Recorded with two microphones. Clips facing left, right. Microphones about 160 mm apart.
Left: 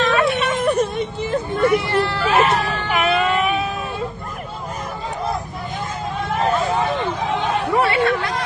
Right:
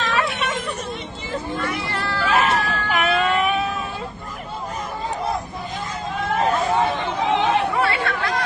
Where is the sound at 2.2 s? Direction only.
Centre (ahead or behind).